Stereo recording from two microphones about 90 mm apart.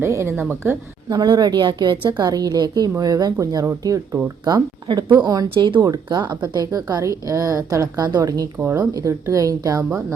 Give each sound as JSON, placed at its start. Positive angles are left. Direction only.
{"t": 0.0, "sound": "speech", "side_deg": -30}
{"t": 1.1, "sound": "a woman's voice", "side_deg": -50}
{"t": 4.9, "sound": "speech", "side_deg": -60}
{"t": 5.1, "sound": "a woman's voice", "side_deg": -45}
{"t": 8.5, "sound": "speech", "side_deg": -20}
{"t": 8.9, "sound": "speech", "side_deg": -40}